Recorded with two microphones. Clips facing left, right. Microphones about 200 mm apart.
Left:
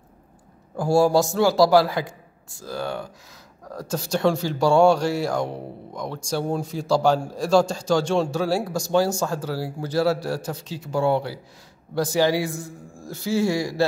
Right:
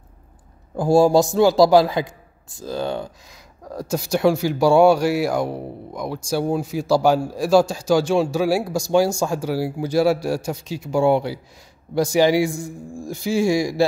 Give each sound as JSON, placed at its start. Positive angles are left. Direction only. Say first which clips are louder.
{"t": 0.7, "sound": "speech", "louder": "right 3 dB", "side_deg": -20}